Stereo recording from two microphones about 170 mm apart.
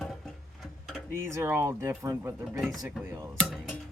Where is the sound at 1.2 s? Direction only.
15° right (ahead or behind).